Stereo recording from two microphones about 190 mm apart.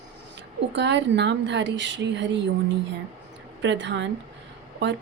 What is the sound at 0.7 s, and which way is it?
Speech, 70° right (ahead or behind).